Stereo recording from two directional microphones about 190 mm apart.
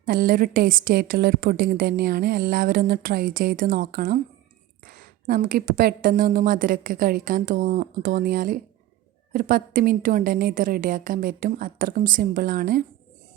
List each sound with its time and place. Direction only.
0.0 s a woman's voice: 50° right (ahead or behind)